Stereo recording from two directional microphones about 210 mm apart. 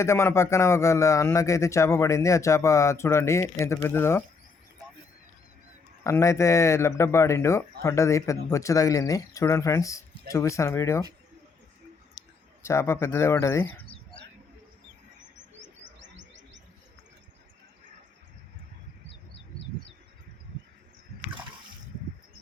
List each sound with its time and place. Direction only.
0.0 s speech: 15° left (ahead or behind)
6.0 s speech: 15° left (ahead or behind)
12.6 s speech: 15° left (ahead or behind)
15.8 s chirp: 60° right (ahead or behind)